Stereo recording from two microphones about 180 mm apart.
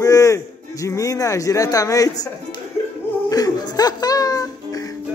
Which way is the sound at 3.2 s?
20° left (ahead or behind).